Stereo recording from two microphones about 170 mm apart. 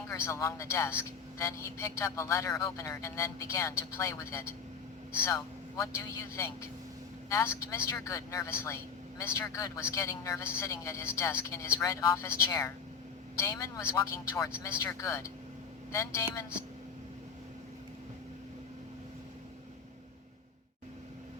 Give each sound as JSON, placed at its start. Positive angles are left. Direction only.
{"t": 0.1, "sound": "a man's voice", "side_deg": 15}
{"t": 5.8, "sound": "a man's voice", "side_deg": 15}